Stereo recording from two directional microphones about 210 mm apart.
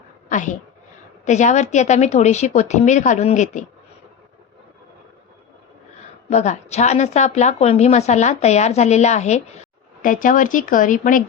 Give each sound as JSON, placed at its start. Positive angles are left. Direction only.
{"t": 0.3, "sound": "a woman's voice", "side_deg": 35}
{"t": 6.3, "sound": "a woman's voice", "side_deg": 35}